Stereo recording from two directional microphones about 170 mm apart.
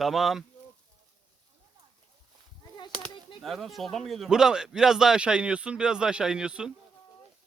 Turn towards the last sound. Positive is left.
turn(degrees=-5)  # may be behind; listen again after turning